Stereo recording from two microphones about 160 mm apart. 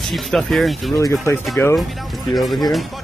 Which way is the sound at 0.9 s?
20° left (ahead or behind).